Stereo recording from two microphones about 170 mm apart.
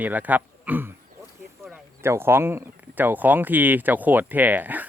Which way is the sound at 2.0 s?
15° right (ahead or behind).